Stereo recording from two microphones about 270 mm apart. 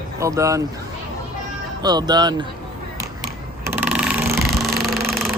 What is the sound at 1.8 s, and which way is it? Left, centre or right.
Speech, centre.